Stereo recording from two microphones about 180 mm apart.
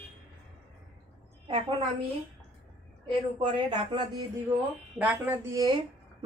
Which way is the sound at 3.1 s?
25° right (ahead or behind).